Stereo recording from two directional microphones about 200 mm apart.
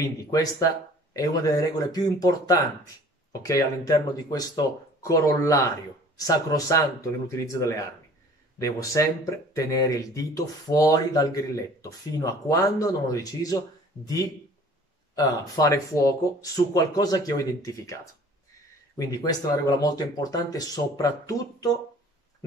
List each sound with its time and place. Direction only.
0.0 s speech: 15° left (ahead or behind)
18.9 s speech: 20° left (ahead or behind)